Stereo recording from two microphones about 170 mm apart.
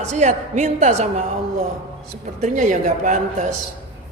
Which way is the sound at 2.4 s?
45° right (ahead or behind).